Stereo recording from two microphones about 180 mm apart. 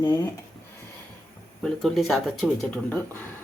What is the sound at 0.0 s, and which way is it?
Speech, 20° left (ahead or behind).